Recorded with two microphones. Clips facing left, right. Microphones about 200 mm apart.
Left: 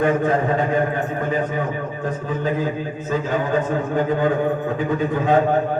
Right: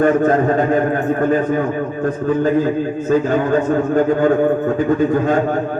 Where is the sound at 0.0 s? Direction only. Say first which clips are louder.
Right 5 dB; 45° right (ahead or behind).